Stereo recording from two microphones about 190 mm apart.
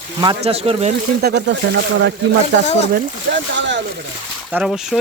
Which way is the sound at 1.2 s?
65° right (ahead or behind).